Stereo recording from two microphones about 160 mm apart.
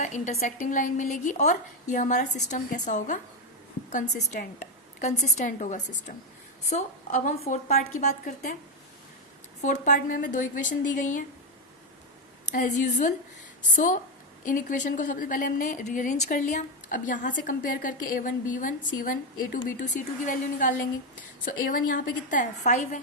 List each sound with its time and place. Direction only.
0.0 s a woman's voice: 45° left (ahead or behind)
9.6 s a woman's voice: 50° left (ahead or behind)
12.5 s a woman's voice: 50° left (ahead or behind)
21.4 s a woman's voice: 60° left (ahead or behind)